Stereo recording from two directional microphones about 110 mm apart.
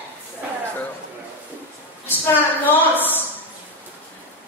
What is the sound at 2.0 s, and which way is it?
A woman's voice, 20° left (ahead or behind).